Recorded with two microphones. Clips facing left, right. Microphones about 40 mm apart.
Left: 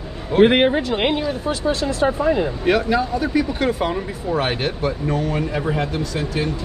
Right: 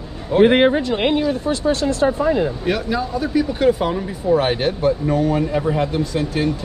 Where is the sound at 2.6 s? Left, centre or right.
Centre.